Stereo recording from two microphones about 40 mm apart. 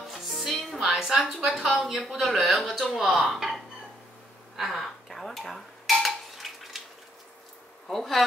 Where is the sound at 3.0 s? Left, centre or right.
Centre.